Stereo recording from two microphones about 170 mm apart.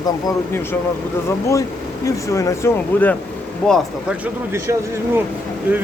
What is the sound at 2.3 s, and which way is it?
Speech, 15° left (ahead or behind).